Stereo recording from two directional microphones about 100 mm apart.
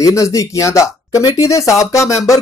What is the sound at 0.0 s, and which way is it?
Speech, 30° left (ahead or behind).